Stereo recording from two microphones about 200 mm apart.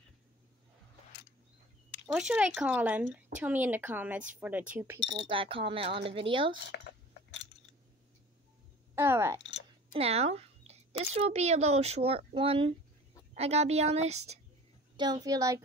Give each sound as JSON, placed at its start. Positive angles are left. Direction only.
{"t": 2.0, "sound": "a woman's voice", "side_deg": -5}
{"t": 5.0, "sound": "speech", "side_deg": -25}
{"t": 6.7, "sound": "dishes", "side_deg": 60}
{"t": 8.9, "sound": "speech", "side_deg": -10}
{"t": 9.9, "sound": "speech", "side_deg": -30}
{"t": 15.0, "sound": "speech", "side_deg": -20}